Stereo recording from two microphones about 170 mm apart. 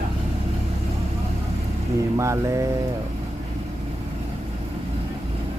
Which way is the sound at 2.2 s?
20° right (ahead or behind).